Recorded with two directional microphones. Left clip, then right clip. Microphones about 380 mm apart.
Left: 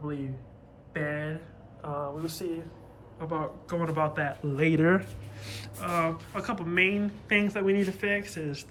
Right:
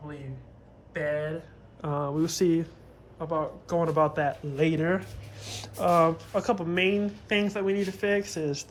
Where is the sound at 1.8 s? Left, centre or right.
Right.